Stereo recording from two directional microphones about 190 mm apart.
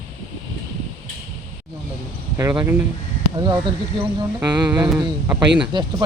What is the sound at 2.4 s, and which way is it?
Speech, 15° right (ahead or behind).